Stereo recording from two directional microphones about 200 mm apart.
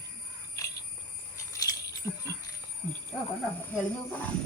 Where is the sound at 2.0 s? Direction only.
15° left (ahead or behind).